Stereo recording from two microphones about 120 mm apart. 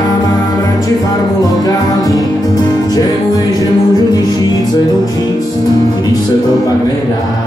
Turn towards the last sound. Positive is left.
turn(degrees=30)  # may be behind; listen again after turning